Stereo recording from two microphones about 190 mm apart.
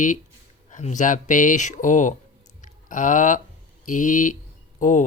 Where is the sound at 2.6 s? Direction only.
45° left (ahead or behind).